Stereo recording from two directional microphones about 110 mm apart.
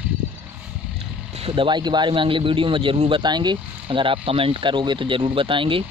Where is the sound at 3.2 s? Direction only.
40° right (ahead or behind).